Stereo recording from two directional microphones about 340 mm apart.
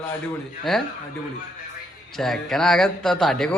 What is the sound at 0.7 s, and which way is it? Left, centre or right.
Speech, centre.